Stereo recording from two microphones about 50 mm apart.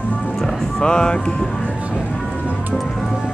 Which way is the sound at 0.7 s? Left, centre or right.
Centre.